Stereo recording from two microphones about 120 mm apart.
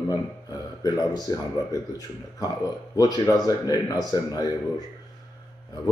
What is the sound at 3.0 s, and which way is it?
Speech, 30° left (ahead or behind).